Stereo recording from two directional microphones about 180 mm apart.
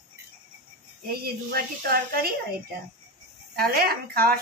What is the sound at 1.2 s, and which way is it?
A woman's voice, 60° right (ahead or behind).